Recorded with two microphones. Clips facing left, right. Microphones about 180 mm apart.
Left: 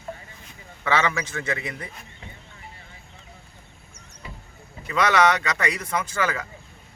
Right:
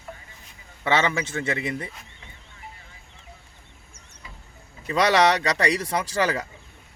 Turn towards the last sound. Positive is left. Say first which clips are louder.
# right 2 dB
turn(degrees=-35)  # may be behind; listen again after turning